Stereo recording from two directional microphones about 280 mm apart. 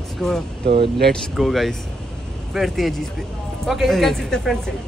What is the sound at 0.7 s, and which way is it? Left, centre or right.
Speech, right.